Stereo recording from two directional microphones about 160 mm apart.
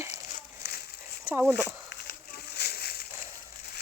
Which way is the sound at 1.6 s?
90° left.